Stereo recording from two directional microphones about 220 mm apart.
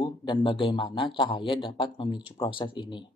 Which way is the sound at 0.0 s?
20° left (ahead or behind).